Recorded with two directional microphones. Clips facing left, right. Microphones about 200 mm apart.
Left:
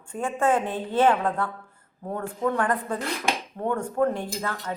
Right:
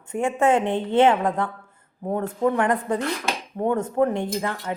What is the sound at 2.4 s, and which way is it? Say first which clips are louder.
A woman's voice: right 3 dB; 25° right (ahead or behind).